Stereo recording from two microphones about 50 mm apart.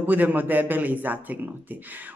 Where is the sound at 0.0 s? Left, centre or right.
Right.